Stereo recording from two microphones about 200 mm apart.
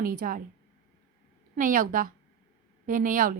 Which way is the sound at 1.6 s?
45° right (ahead or behind).